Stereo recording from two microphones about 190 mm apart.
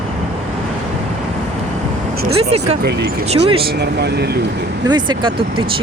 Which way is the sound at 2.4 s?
35° right (ahead or behind).